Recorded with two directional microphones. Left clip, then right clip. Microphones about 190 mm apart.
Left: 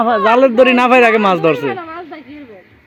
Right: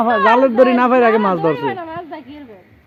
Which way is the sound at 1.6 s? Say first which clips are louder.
Left 1 dB; 35° right (ahead or behind).